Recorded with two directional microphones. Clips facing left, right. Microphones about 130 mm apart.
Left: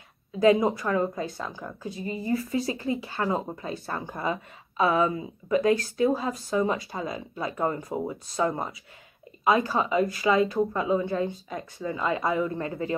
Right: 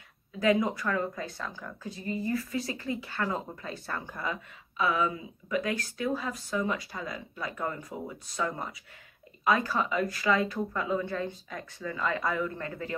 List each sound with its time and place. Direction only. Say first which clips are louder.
0.4 s a woman's voice: left 5 dB; 25° left (ahead or behind)